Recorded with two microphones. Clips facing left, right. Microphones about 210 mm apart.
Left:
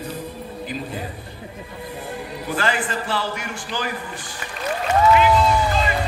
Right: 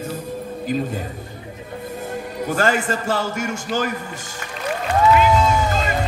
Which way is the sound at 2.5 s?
45° right (ahead or behind).